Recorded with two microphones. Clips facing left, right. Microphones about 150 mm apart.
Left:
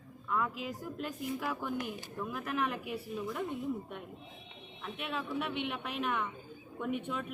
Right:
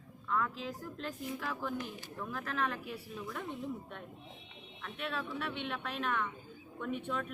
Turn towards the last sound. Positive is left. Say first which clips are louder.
# left 1 dB
turn(degrees=10)  # may be behind; listen again after turning